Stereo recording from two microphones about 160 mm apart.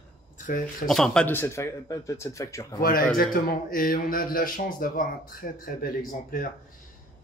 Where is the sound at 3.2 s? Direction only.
60° left (ahead or behind).